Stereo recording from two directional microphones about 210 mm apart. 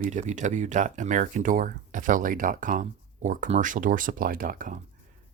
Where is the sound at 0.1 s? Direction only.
35° right (ahead or behind).